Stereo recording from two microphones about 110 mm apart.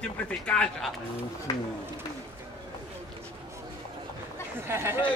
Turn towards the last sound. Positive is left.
turn(degrees=-25)  # may be behind; listen again after turning